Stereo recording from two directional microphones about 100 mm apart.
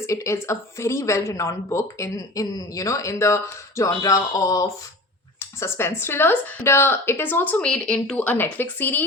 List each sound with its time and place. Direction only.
0.0 s speech: 30° left (ahead or behind)
5.4 s speech: 25° left (ahead or behind)